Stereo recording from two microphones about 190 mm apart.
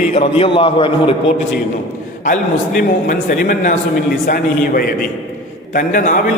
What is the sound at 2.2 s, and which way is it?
A man's voice, 45° left (ahead or behind).